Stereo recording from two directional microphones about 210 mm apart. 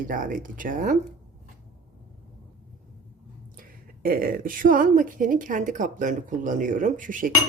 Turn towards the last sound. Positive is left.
turn(degrees=-40)  # may be behind; listen again after turning